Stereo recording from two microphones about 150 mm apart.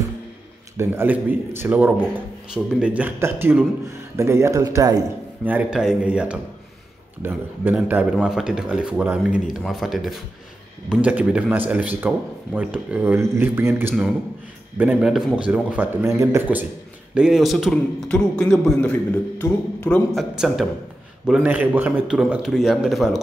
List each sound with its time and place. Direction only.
0.7 s a man's voice: 15° right (ahead or behind)
5.4 s a man's voice: 10° right (ahead or behind); by 20.0 s 10° left (ahead or behind)
20.1 s a man's voice: centre (ahead or behind)
21.4 s a man's voice: 15° right (ahead or behind)